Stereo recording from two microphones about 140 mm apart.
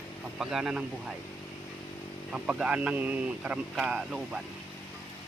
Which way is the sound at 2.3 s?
5° right (ahead or behind).